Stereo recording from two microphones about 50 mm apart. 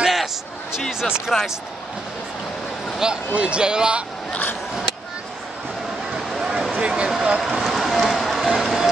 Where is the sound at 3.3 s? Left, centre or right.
Right.